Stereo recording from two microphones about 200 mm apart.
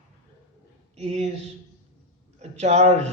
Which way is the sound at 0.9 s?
35° right (ahead or behind).